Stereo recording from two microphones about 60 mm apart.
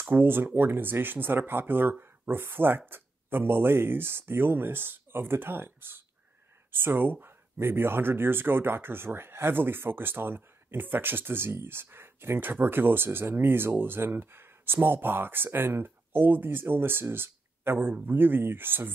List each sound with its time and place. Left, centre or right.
0.0 s speech: right